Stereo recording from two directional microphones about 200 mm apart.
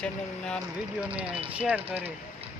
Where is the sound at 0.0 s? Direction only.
5° left (ahead or behind).